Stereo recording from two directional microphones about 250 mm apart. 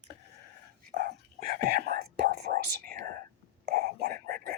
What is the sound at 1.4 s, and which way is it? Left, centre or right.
Whispering, right.